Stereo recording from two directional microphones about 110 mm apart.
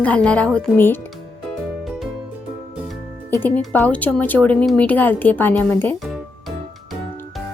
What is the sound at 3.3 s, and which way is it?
Speech, 15° left (ahead or behind).